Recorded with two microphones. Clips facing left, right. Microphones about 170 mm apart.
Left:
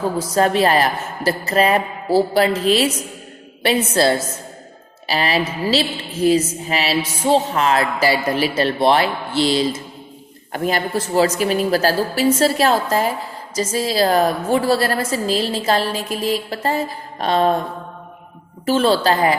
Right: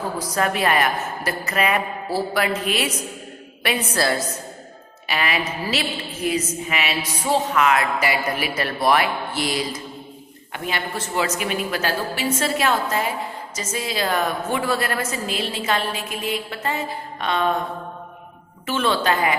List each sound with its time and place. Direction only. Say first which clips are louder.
0.2 s a woman's voice: left 6 dB; 30° left (ahead or behind)
10.5 s a woman's voice: left 7 dB; 40° left (ahead or behind)
18.6 s a woman's voice: left 6 dB; 35° left (ahead or behind)